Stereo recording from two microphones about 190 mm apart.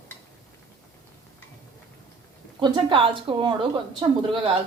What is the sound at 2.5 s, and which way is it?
A woman's voice, 25° right (ahead or behind).